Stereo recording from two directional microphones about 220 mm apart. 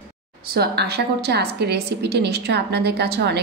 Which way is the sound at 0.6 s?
45° right (ahead or behind).